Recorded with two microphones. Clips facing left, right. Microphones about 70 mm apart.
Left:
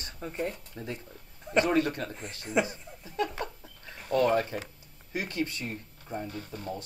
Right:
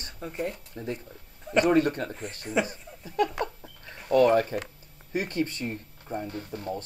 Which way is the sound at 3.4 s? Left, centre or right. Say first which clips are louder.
Right 5 dB; right.